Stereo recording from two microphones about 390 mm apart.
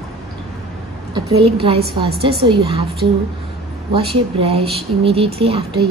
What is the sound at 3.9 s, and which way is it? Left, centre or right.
Speech, centre.